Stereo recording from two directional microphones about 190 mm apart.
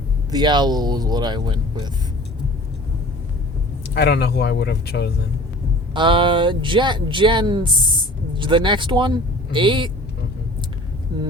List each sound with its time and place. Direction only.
0.3 s speech: 20° right (ahead or behind)
3.9 s speech: 60° left (ahead or behind)
5.9 s speech: 25° right (ahead or behind)